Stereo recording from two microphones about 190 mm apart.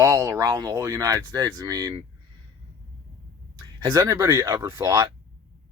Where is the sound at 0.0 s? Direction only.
15° right (ahead or behind).